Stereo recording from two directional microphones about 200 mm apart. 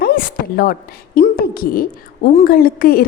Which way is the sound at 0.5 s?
45° left (ahead or behind).